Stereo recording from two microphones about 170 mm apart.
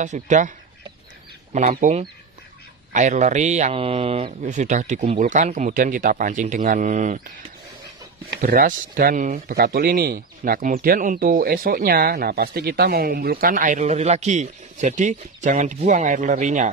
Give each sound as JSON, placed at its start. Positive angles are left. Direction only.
{"t": 0.0, "sound": "a man's voice", "side_deg": -45}
{"t": 1.5, "sound": "a man's voice", "side_deg": -50}
{"t": 8.5, "sound": "speech", "side_deg": -55}